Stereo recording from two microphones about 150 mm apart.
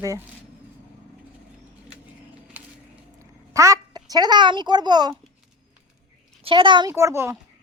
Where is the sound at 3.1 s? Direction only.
20° right (ahead or behind).